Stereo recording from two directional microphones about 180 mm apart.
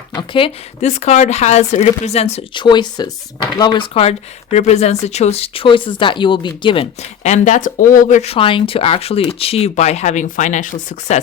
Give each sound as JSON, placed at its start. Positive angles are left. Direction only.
{"t": 0.1, "sound": "speech", "side_deg": 25}
{"t": 2.6, "sound": "speech", "side_deg": 25}
{"t": 7.2, "sound": "speech", "side_deg": 40}